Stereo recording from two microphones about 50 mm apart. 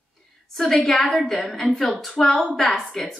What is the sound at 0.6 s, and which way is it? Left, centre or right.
A woman's voice, centre.